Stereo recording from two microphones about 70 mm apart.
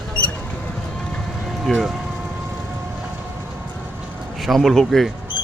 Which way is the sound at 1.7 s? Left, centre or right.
Centre.